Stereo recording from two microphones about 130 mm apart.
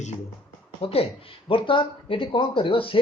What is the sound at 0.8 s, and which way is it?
Speech, 50° left (ahead or behind).